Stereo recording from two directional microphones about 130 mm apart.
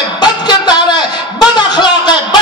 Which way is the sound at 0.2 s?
35° left (ahead or behind).